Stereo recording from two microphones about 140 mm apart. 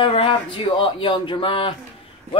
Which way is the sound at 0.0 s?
40° left (ahead or behind).